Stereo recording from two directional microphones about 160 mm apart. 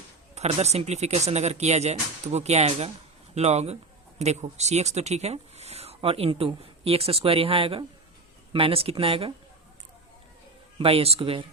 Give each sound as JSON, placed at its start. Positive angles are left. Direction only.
{"t": 0.3, "sound": "speech", "side_deg": -45}
{"t": 10.8, "sound": "speech", "side_deg": -35}